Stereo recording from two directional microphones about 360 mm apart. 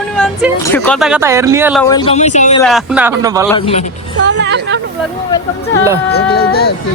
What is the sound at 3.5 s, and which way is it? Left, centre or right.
Speech, centre.